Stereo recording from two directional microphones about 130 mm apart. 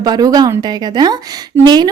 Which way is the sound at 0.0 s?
30° right (ahead or behind).